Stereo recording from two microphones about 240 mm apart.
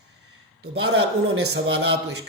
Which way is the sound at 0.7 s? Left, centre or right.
Right.